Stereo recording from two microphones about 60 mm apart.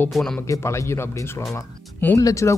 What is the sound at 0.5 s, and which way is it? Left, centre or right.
Speech, left.